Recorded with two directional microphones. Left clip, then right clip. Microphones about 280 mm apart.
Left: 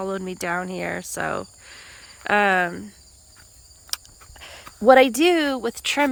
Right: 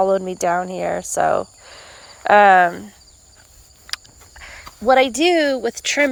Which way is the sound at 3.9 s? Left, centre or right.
Left.